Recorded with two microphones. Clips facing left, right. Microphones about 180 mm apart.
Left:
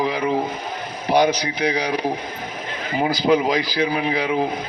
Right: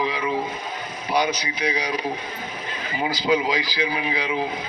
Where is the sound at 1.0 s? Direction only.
60° left (ahead or behind).